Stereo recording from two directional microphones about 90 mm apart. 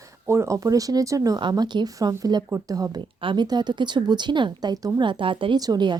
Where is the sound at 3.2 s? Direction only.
60° right (ahead or behind).